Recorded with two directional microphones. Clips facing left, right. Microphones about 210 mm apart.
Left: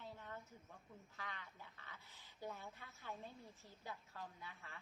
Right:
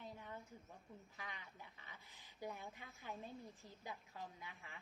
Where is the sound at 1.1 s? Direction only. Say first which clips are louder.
Left 3 dB; 15° right (ahead or behind).